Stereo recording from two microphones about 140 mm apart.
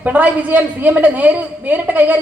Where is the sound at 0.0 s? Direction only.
10° right (ahead or behind).